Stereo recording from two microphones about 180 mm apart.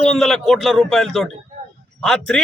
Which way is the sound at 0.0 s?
Centre (ahead or behind).